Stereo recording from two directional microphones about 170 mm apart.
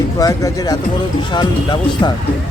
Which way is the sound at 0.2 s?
20° left (ahead or behind).